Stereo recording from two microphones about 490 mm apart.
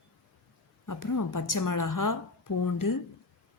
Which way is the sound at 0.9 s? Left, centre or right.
Left.